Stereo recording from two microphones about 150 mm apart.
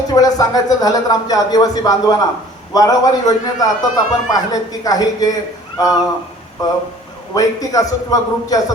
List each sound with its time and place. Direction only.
0.1 s a man's voice: 25° left (ahead or behind)